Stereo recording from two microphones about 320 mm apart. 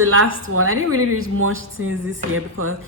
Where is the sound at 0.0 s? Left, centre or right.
Right.